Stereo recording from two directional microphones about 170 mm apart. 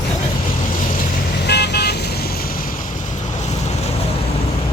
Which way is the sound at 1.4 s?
75° left (ahead or behind).